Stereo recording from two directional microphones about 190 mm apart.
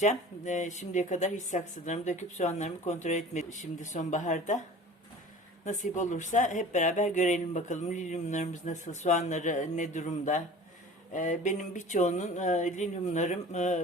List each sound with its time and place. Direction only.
0.0 s speech: 40° left (ahead or behind)
5.6 s speech: 40° left (ahead or behind)